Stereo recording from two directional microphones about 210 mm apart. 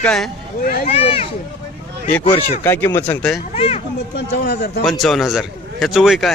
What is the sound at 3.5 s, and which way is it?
Speech, 30° left (ahead or behind).